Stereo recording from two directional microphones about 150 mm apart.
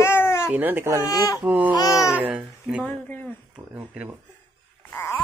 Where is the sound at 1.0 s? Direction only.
25° left (ahead or behind).